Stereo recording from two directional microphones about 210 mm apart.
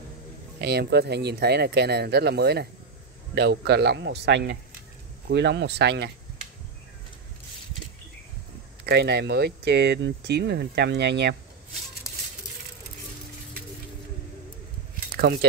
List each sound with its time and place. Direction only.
0.6 s speech: 50° right (ahead or behind)
8.8 s speech: 55° right (ahead or behind)
12.1 s a sound: 15° left (ahead or behind)
15.1 s speech: 50° right (ahead or behind)